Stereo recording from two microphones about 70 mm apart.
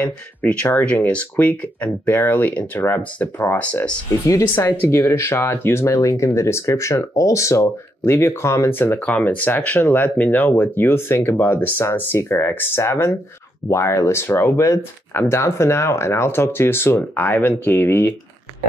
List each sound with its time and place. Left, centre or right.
0.0 s speech: left
4.6 s speech: left
5.9 s speech: left
9.0 s speech: centre
10.1 s speech: left